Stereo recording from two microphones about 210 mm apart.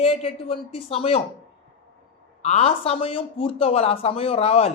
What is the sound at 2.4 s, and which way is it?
Speech, 30° left (ahead or behind).